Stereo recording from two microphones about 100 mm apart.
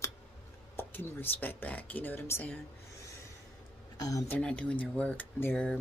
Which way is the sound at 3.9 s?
35° left (ahead or behind).